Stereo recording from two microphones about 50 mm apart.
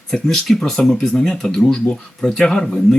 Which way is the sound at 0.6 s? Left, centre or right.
Centre.